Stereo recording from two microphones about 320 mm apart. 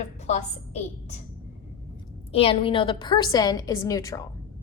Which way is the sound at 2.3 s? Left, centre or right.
Centre.